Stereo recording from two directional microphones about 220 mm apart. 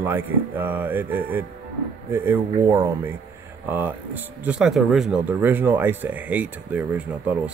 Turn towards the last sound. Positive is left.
turn(degrees=-5)  # may be behind; listen again after turning